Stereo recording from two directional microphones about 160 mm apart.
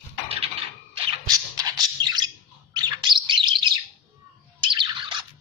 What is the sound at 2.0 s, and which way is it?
Bird, 25° right (ahead or behind).